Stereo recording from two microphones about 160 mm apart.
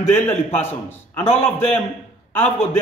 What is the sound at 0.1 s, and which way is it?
Speech, 10° left (ahead or behind).